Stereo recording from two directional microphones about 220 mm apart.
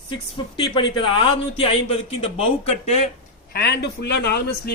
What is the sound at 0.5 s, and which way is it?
A man's voice, 20° left (ahead or behind).